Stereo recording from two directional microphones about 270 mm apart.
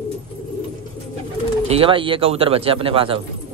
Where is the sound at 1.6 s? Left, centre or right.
Right.